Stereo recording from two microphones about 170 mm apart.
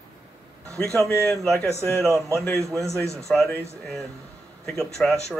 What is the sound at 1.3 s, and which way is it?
Speech, 5° left (ahead or behind).